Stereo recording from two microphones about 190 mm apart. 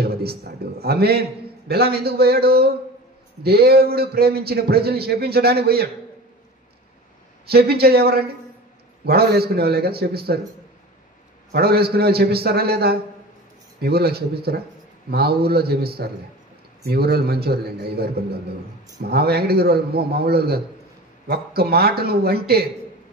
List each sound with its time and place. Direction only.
0.0 s a man's voice: 55° right (ahead or behind)
7.4 s a man's voice: 55° right (ahead or behind)
11.5 s a man's voice: 55° right (ahead or behind)